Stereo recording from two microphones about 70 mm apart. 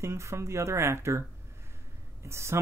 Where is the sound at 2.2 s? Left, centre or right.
Right.